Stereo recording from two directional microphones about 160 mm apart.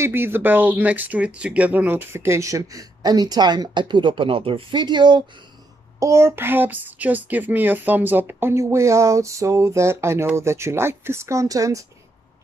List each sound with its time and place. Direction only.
0.0 s speech: 15° right (ahead or behind)
5.9 s speech: 20° right (ahead or behind)